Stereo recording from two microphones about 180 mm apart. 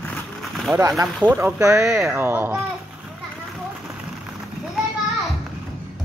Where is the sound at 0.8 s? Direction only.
15° right (ahead or behind).